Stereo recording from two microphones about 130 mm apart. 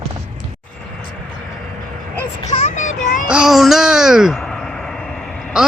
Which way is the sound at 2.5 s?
70° left (ahead or behind).